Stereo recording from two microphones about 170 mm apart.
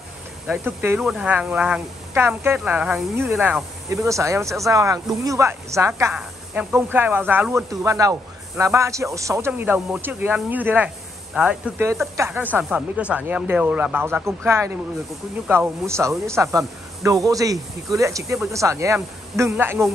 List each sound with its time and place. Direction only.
0.5 s speech: 10° right (ahead or behind)